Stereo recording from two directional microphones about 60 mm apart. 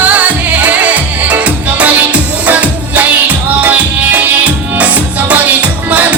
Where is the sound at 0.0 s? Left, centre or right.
Right.